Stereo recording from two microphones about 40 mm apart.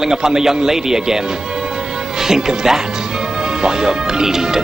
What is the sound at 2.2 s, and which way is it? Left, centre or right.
Speech, centre.